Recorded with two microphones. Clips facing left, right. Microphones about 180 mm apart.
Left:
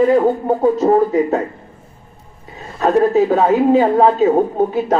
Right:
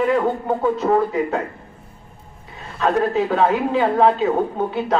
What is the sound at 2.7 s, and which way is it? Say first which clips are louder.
Speech: left 6 dB; 40° left (ahead or behind).